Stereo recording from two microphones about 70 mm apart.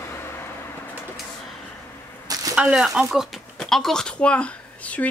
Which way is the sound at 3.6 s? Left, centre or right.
Centre.